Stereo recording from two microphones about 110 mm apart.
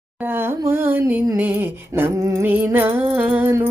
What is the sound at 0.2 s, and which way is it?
Speech, 20° right (ahead or behind).